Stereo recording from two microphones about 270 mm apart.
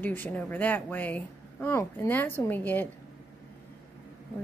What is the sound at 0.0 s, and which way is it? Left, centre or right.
Speech, centre.